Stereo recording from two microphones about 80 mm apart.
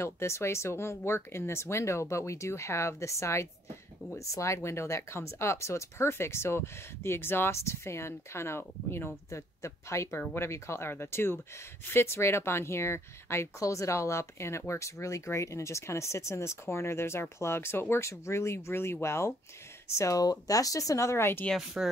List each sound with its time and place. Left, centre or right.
0.0 s speech: left
20.0 s speech: left
21.8 s speech: centre